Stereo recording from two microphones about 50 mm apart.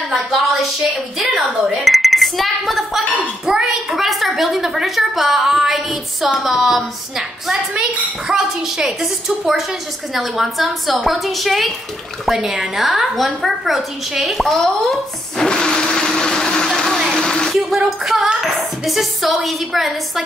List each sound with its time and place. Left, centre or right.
0.1 s a sound: centre
1.9 s chink: centre
3.4 s a woman's voice: centre
15.4 s vehicle: centre
17.1 s a sound: centre
17.6 s a woman's voice: centre